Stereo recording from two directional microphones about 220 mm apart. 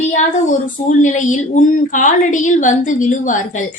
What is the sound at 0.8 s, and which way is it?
A woman's voice, 35° left (ahead or behind).